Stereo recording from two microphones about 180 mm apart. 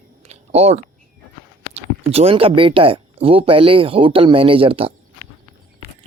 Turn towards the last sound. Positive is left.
turn(degrees=-30)  # may be behind; listen again after turning